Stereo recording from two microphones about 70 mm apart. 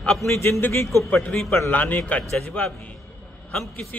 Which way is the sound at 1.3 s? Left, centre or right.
Centre.